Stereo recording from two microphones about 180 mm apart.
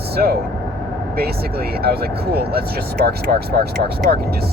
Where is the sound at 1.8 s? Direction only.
60° right (ahead or behind).